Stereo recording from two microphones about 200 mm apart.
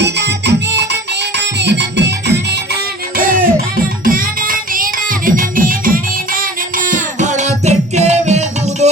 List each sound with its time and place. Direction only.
0.0 s music: 60° right (ahead or behind)
3.2 s music: 45° right (ahead or behind)